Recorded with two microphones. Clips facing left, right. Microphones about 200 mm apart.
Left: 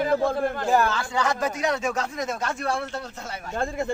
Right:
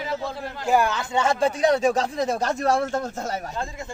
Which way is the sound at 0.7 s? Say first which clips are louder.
Right 4 dB; 15° right (ahead or behind).